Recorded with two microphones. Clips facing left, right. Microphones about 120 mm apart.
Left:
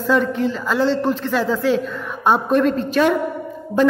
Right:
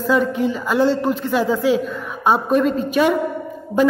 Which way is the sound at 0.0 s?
5° right (ahead or behind).